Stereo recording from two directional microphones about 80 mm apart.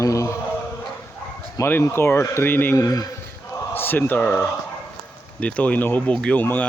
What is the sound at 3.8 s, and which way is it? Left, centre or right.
Speech, left.